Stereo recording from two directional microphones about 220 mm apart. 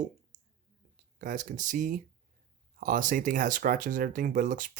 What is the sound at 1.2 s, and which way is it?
Speech, 35° right (ahead or behind).